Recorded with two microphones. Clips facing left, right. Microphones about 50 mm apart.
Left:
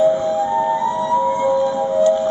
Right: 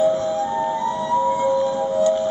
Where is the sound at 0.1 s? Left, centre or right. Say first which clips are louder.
Left 4 dB; centre.